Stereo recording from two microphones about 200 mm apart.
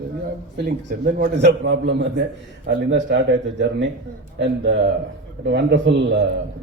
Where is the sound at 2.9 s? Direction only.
60° right (ahead or behind).